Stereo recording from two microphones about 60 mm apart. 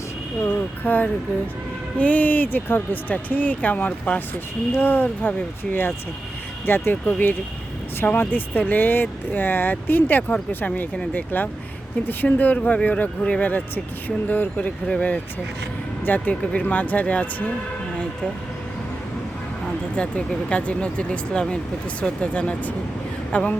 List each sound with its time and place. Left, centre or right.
0.4 s speech: left
4.7 s speech: left
6.7 s speech: left
20.0 s speech: centre